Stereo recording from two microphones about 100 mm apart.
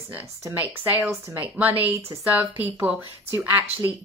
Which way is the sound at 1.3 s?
15° right (ahead or behind).